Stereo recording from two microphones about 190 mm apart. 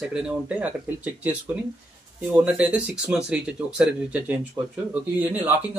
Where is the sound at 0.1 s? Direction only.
5° right (ahead or behind).